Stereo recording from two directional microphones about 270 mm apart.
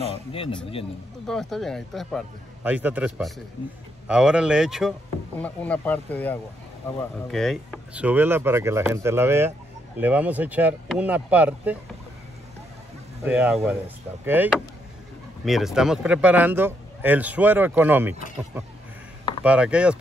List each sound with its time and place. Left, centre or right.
0.3 s speech: centre
1.2 s speech: centre
13.3 s speech: centre
19.4 s speech: centre